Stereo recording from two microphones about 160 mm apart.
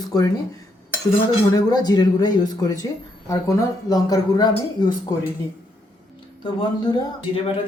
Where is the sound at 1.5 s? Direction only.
25° left (ahead or behind).